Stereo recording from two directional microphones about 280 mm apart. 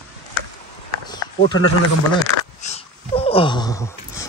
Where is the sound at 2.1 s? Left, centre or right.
Left.